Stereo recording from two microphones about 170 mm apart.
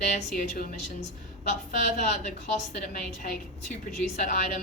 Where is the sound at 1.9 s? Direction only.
45° left (ahead or behind).